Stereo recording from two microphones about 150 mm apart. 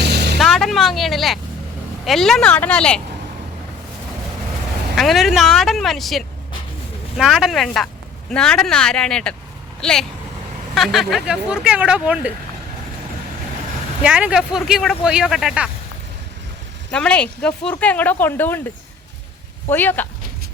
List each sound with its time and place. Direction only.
0.0 s a sound: 90° right
0.3 s vehicle: centre (ahead or behind)
2.0 s speech: centre (ahead or behind)
4.9 s speech: centre (ahead or behind)
14.0 s speech: 5° right (ahead or behind)
16.9 s speech: 5° left (ahead or behind)
19.7 s speech: 15° left (ahead or behind)